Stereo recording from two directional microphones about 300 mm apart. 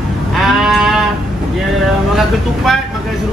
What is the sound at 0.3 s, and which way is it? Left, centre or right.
Sheep, centre.